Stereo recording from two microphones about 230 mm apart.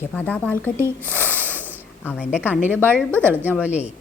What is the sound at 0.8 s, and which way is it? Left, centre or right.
A woman's voice, centre.